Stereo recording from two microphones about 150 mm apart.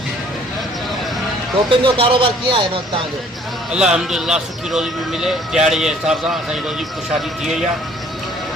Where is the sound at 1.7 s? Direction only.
35° right (ahead or behind).